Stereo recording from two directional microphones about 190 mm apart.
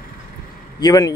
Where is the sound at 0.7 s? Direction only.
20° left (ahead or behind).